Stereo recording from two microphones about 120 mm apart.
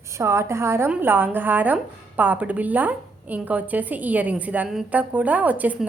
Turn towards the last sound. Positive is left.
turn(degrees=-15)  # may be behind; listen again after turning